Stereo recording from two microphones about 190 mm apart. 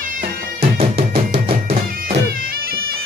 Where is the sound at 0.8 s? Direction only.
30° right (ahead or behind).